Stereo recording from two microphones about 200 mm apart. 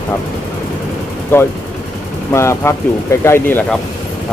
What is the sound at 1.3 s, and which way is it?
Speech, 10° left (ahead or behind).